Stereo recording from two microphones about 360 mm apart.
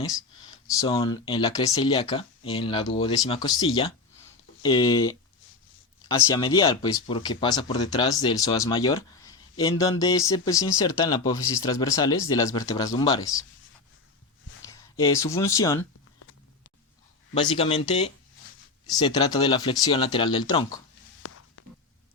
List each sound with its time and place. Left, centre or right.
0.7 s speech: centre
14.7 s speech: centre
17.3 s speech: centre
21.2 s a sound: left